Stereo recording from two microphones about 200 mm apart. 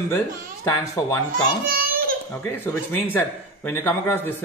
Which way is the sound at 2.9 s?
10° left (ahead or behind).